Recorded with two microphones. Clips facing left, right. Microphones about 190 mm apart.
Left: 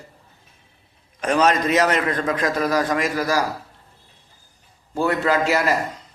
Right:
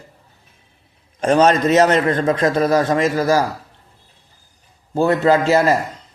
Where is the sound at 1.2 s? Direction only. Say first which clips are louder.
Right 5 dB; 30° right (ahead or behind).